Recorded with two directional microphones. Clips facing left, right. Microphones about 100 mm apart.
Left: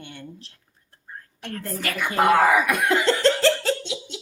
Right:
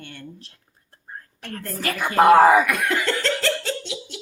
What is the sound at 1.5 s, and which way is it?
Speech, 35° right (ahead or behind).